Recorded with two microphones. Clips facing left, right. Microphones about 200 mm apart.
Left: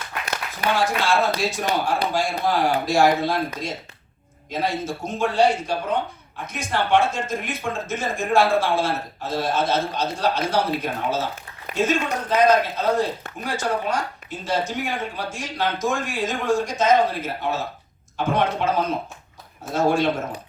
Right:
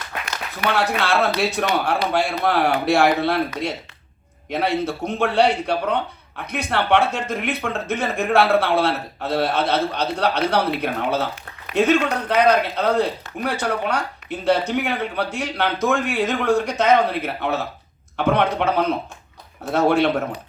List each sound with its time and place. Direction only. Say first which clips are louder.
0.7 s a man's voice: even; 65° right (ahead or behind)